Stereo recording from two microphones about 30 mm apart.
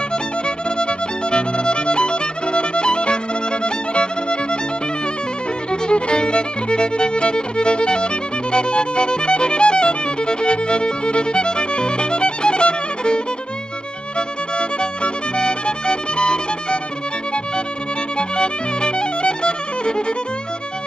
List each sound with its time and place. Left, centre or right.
0.7 s music: left
5.7 s violin: left
14.1 s music: left
18.1 s music: left